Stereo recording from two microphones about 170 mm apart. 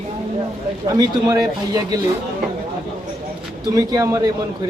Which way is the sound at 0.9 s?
20° right (ahead or behind).